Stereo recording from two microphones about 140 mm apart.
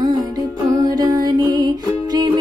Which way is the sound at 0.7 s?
25° right (ahead or behind).